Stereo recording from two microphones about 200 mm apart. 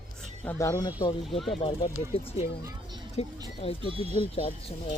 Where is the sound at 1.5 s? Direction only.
30° left (ahead or behind).